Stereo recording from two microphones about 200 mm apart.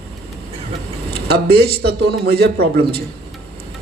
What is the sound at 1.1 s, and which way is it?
Speech, 55° right (ahead or behind).